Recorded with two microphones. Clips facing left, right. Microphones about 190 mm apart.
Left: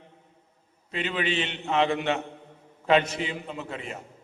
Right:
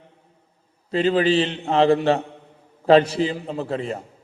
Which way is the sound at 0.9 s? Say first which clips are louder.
Right 10 dB; 35° right (ahead or behind).